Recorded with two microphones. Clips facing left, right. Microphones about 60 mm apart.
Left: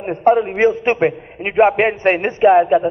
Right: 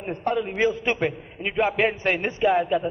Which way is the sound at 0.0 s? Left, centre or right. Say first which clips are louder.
Left 11 dB; left.